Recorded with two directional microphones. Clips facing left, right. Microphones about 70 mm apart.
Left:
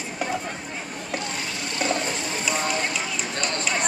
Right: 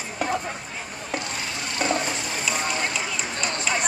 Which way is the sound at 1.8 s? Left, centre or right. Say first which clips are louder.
Right 1 dB; right.